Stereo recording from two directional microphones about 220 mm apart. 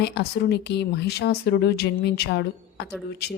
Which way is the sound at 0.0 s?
50° left (ahead or behind).